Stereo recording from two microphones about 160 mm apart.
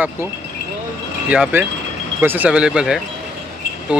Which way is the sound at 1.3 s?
10° right (ahead or behind).